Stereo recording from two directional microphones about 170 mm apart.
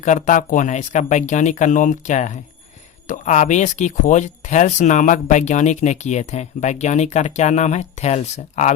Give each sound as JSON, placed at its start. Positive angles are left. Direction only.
{"t": 0.0, "sound": "speech", "side_deg": 45}